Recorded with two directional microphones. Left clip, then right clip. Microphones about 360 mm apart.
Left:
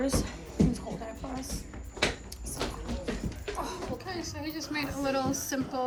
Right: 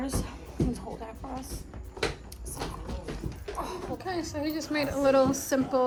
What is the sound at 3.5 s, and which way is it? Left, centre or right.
Music, centre.